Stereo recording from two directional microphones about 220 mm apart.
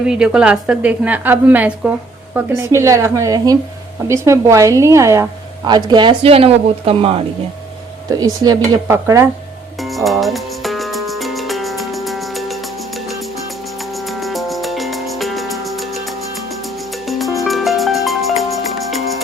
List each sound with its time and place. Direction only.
0.0 s a woman's voice: 5° right (ahead or behind)
9.8 s music: centre (ahead or behind)